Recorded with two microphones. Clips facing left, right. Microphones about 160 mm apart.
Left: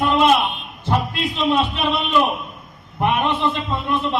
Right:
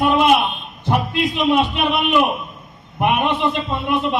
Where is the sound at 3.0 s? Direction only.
15° right (ahead or behind).